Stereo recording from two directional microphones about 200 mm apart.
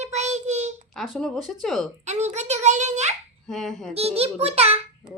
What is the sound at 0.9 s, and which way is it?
Speech, centre (ahead or behind).